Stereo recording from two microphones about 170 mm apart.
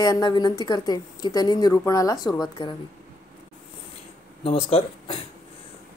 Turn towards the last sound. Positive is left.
turn(degrees=35)  # may be behind; listen again after turning